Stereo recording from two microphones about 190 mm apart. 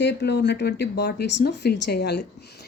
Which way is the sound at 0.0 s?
65° left (ahead or behind).